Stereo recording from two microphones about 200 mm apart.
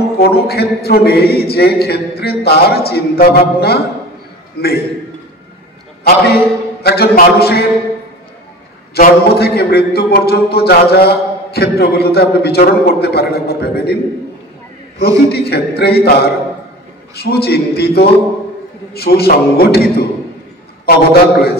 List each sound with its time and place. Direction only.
0.2 s a man's voice: 50° left (ahead or behind)
6.0 s a man's voice: 50° left (ahead or behind)
8.9 s a man's voice: 50° left (ahead or behind)
15.0 s a man's voice: 50° left (ahead or behind)